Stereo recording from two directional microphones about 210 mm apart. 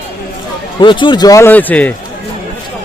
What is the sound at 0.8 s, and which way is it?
Speech, 20° left (ahead or behind).